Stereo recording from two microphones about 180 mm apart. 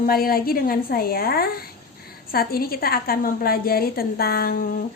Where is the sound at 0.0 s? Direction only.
55° left (ahead or behind).